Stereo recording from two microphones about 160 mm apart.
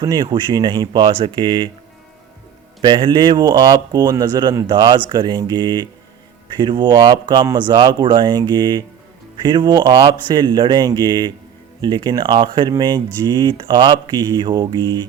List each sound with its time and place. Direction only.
0.0 s speech: 25° right (ahead or behind)
2.8 s speech: 30° right (ahead or behind)